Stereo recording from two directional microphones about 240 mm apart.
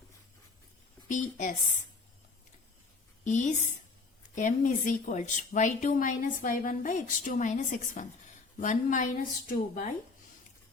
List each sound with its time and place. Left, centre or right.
1.0 s speech: left
3.2 s speech: left